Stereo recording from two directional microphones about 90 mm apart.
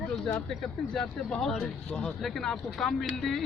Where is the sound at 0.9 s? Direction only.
5° left (ahead or behind).